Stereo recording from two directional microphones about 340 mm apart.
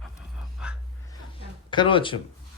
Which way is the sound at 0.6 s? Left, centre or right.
Centre.